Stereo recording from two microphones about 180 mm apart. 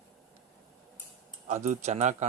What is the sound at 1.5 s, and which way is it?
Speech, 40° right (ahead or behind).